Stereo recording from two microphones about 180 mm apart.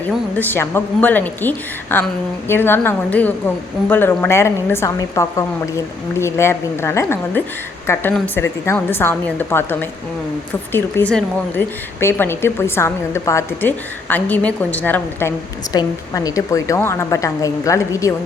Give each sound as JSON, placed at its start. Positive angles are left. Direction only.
{"t": 0.3, "sound": "a woman's voice", "side_deg": 10}
{"t": 15.7, "sound": "a woman's voice", "side_deg": 20}